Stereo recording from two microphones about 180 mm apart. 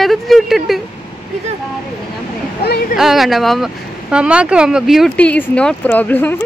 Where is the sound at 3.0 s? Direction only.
Centre (ahead or behind).